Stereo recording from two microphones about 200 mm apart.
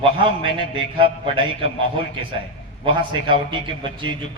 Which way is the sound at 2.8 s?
25° right (ahead or behind).